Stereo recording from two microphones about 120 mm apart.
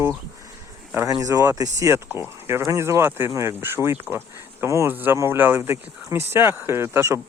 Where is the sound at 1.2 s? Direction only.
25° right (ahead or behind).